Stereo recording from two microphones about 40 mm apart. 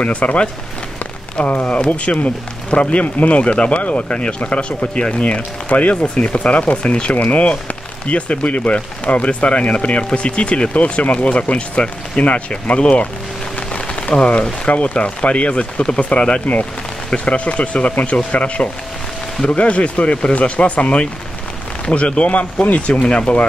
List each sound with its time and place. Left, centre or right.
0.0 s speech: left